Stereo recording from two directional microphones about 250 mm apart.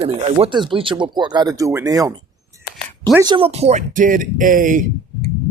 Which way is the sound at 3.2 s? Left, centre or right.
Right.